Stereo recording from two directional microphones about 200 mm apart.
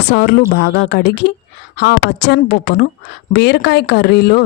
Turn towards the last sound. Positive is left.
turn(degrees=55)  # may be behind; listen again after turning